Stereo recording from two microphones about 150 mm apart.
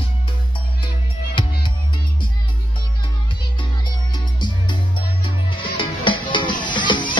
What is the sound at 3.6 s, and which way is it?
Music, 30° left (ahead or behind).